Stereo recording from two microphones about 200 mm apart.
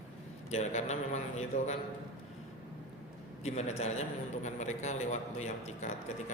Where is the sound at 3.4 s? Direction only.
35° left (ahead or behind).